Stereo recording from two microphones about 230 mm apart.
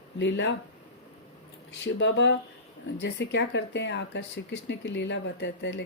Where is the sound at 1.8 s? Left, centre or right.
Left.